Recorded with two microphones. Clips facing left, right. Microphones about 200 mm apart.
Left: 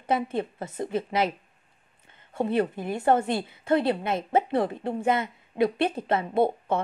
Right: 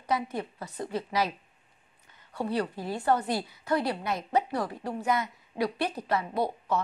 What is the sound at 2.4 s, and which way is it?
A woman's voice, 20° left (ahead or behind).